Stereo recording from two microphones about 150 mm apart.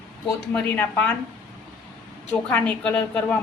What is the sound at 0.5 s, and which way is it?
Speech, 10° left (ahead or behind).